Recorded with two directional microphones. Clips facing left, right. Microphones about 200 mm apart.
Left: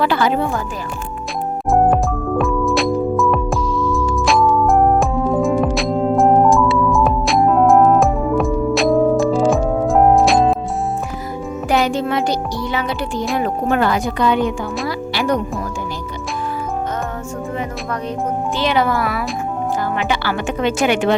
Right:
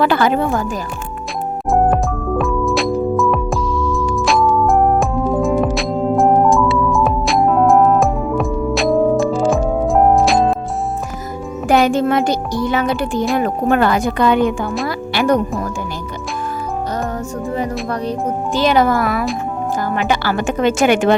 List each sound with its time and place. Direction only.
0.0 s speech: 50° right (ahead or behind)
1.7 s music: centre (ahead or behind)
11.7 s speech: 50° right (ahead or behind)
14.8 s music: 50° right (ahead or behind)
18.5 s speech: 45° right (ahead or behind)